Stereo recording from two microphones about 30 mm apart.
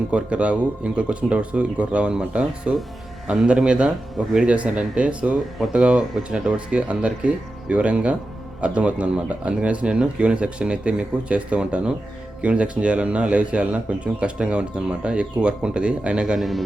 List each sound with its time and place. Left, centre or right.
0.1 s speech: right
2.1 s speech: right
4.4 s speech: right
5.7 s speech: right
16.4 s a man's voice: centre